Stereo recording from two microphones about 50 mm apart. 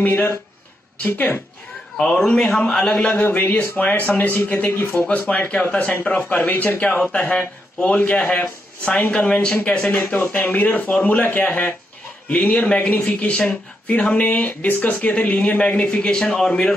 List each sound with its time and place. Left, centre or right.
0.9 s speech: left
2.0 s a man's voice: centre
3.1 s a man's voice: left
3.5 s speech: left
10.1 s speech: left
16.1 s a man's voice: centre